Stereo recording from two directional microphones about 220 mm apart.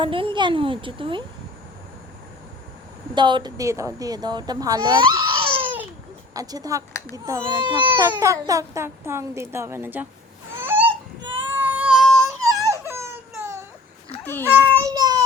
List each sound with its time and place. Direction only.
0.0 s speech: 25° right (ahead or behind)
3.2 s speech: 20° right (ahead or behind)
10.5 s a sound: 10° right (ahead or behind)
11.4 s child singing: 10° right (ahead or behind)
12.6 s crying: 10° right (ahead or behind)
14.4 s a sound: 10° right (ahead or behind)
14.9 s child singing: 20° right (ahead or behind)